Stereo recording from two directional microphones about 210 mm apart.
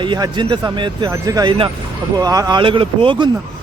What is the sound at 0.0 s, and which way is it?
Speech, 20° right (ahead or behind).